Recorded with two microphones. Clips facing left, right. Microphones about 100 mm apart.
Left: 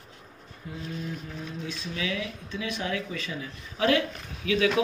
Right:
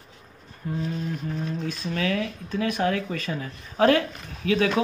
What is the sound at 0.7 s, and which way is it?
A man's voice, 50° right (ahead or behind).